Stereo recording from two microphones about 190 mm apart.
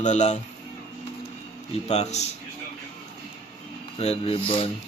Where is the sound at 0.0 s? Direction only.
35° left (ahead or behind).